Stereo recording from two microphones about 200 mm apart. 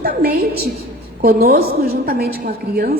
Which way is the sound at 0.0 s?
50° right (ahead or behind).